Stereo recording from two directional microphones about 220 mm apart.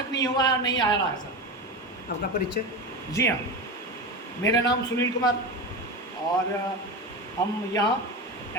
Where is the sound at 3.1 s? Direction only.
15° left (ahead or behind).